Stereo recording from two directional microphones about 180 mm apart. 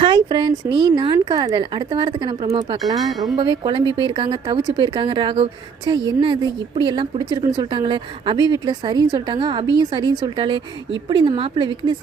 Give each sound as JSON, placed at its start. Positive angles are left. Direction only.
{"t": 0.0, "sound": "speech", "side_deg": -25}